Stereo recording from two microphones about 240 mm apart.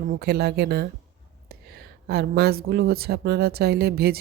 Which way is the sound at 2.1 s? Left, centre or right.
Right.